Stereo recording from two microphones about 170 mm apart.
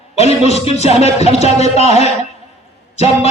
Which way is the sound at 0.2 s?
40° left (ahead or behind).